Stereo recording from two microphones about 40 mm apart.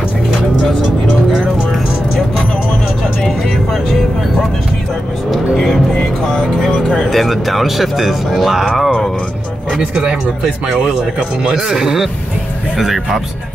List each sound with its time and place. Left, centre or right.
3.2 s vehicle: centre
6.6 s music: centre
7.1 s speech: centre
9.8 s speech: centre
11.6 s speech: centre